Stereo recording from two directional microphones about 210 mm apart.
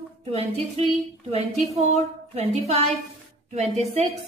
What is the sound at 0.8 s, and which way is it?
A woman's voice, 30° right (ahead or behind).